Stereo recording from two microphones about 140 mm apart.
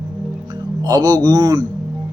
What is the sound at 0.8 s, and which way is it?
Speech, 25° right (ahead or behind).